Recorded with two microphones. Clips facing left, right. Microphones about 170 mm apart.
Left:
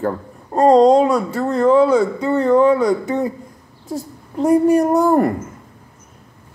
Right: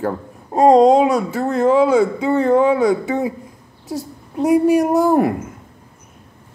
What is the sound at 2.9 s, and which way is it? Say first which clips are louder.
Speech: even; 10° right (ahead or behind).